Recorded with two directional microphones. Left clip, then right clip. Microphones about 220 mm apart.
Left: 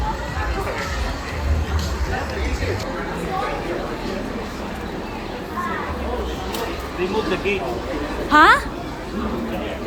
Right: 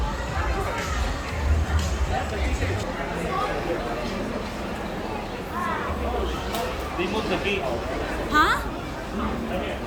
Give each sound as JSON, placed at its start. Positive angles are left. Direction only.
{"t": 8.3, "sound": "speech", "side_deg": 10}